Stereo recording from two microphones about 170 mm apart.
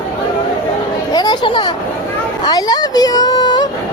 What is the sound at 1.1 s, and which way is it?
Children playing, 25° left (ahead or behind).